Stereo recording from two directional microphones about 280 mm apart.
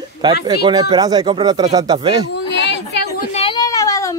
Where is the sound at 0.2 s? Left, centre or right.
Centre.